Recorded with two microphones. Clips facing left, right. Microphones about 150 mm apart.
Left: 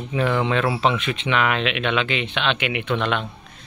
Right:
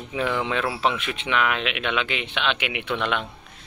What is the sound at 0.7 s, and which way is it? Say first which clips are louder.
Speech: left 4 dB; 5° right (ahead or behind).